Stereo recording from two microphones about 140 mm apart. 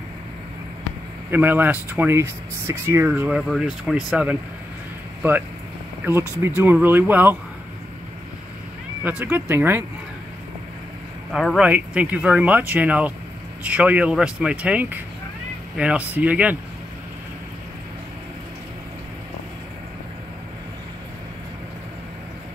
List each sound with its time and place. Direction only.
1.3 s speech: 15° right (ahead or behind)
6.4 s speech: 15° right (ahead or behind)
9.2 s speech: 10° right (ahead or behind)
11.3 s speech: centre (ahead or behind)